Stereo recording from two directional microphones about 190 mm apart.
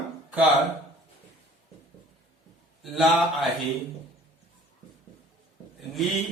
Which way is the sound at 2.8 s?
Centre (ahead or behind).